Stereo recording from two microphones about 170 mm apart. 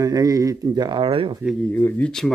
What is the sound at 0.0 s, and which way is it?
Speech, 20° right (ahead or behind).